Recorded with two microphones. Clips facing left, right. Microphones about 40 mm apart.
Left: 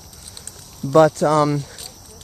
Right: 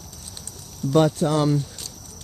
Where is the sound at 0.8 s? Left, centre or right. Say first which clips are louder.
Left 4 dB; left.